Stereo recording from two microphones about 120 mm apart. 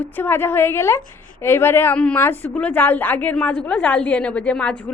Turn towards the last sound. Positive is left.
turn(degrees=10)  # may be behind; listen again after turning